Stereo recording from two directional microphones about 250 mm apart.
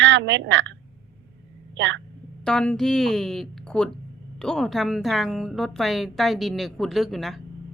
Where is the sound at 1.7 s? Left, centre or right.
Right.